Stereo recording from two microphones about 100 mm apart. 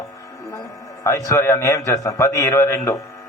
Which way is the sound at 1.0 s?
30° left (ahead or behind).